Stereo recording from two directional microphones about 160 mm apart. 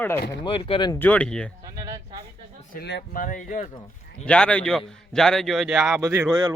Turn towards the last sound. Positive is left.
turn(degrees=-25)  # may be behind; listen again after turning